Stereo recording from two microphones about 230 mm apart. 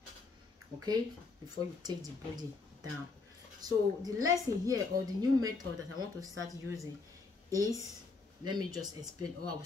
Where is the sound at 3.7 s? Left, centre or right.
Centre.